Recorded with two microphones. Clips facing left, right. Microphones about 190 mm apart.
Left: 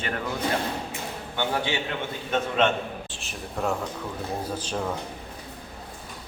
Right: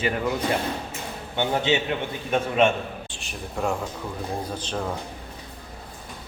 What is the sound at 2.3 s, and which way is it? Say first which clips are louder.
Speech: right 3 dB; 10° right (ahead or behind).